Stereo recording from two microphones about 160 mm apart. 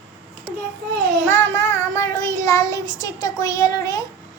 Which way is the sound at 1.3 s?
15° left (ahead or behind).